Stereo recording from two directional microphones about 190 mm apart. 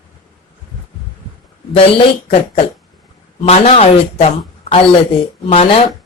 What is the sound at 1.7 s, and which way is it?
Speech, 30° left (ahead or behind).